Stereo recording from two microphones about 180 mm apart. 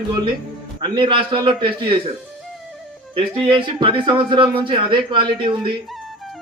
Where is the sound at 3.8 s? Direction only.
25° right (ahead or behind).